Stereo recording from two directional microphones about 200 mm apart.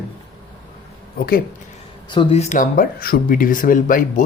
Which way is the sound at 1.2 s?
50° left (ahead or behind).